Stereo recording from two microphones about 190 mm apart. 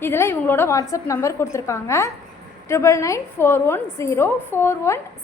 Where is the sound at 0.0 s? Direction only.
15° left (ahead or behind).